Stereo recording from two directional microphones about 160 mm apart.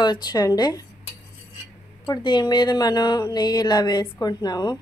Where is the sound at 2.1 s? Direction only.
30° left (ahead or behind).